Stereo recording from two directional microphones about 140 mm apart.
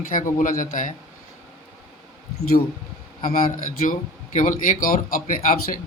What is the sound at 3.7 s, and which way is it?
A man's voice, 70° left (ahead or behind).